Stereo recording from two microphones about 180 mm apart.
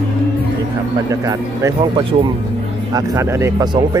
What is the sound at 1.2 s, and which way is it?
Speech, 20° right (ahead or behind).